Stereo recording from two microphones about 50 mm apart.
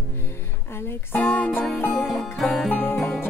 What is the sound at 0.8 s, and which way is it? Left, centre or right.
Music, left.